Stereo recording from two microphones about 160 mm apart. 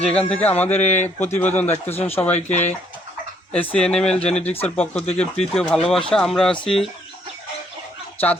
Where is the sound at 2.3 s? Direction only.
45° left (ahead or behind).